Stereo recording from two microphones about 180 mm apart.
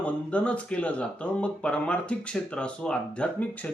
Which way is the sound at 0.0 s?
5° left (ahead or behind).